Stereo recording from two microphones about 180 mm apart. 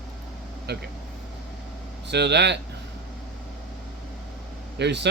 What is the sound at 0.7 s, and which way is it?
Speech, 65° right (ahead or behind).